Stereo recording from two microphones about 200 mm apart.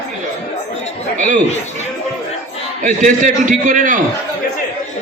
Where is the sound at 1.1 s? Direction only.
40° right (ahead or behind).